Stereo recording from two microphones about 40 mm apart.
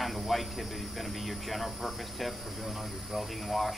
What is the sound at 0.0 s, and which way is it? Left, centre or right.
Speech, centre.